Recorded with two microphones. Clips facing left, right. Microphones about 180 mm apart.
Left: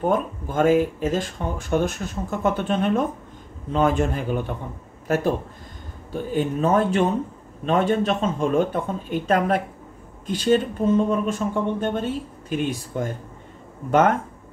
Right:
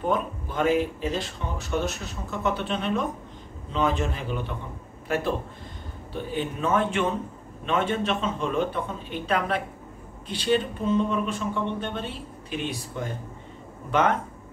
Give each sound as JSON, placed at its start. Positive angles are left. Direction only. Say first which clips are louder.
{"t": 0.0, "sound": "speech", "louder": "left 4 dB", "side_deg": 45}
{"t": 6.3, "sound": "a man's voice", "louder": "left 5 dB", "side_deg": 40}